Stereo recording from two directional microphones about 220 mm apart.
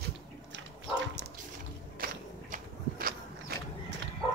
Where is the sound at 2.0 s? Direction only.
40° right (ahead or behind).